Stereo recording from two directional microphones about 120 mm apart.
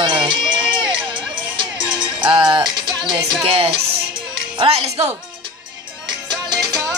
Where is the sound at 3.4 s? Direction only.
50° right (ahead or behind).